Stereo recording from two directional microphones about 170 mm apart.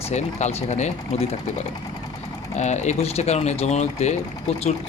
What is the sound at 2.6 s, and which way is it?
Speech, 45° left (ahead or behind).